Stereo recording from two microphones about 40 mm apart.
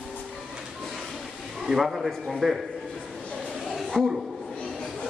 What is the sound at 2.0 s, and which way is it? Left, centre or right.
Speech, centre.